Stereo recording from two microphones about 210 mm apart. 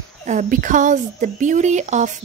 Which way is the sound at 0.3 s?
40° right (ahead or behind).